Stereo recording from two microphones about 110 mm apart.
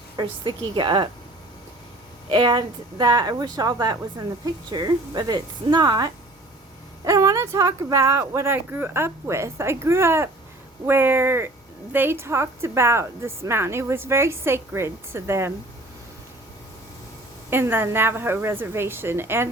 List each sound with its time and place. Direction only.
0.2 s a woman's voice: 45° right (ahead or behind)
2.3 s a woman's voice: 40° right (ahead or behind); by 15.5 s 25° right (ahead or behind)
17.5 s a woman's voice: 20° right (ahead or behind)